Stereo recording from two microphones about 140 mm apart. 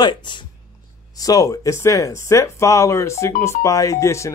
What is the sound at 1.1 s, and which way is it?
Speech, 25° left (ahead or behind).